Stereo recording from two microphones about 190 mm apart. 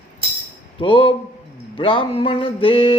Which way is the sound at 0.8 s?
25° left (ahead or behind).